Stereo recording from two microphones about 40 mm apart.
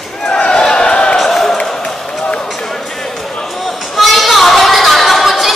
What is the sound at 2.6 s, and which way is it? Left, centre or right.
Music, centre.